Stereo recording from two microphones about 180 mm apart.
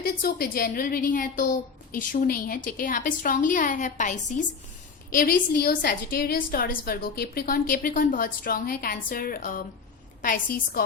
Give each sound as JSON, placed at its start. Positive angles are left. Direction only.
{"t": 0.0, "sound": "a woman's voice", "side_deg": 55}
{"t": 5.1, "sound": "a woman's voice", "side_deg": 55}